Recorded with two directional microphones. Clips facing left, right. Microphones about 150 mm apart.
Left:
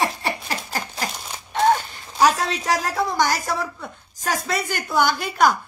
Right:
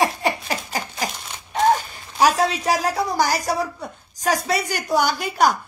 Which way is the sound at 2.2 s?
10° right (ahead or behind).